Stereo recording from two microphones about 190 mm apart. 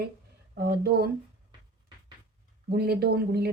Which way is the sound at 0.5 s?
55° right (ahead or behind).